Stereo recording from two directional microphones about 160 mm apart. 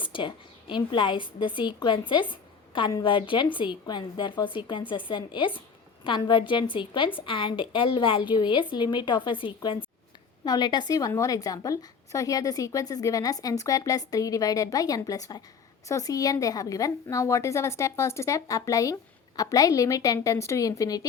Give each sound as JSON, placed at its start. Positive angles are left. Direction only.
{"t": 0.0, "sound": "a woman's voice", "side_deg": 30}